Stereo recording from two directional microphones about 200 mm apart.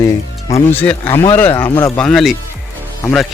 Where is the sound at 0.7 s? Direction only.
10° left (ahead or behind).